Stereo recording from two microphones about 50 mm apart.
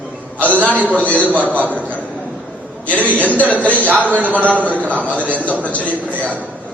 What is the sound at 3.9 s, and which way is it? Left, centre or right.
A man's voice, right.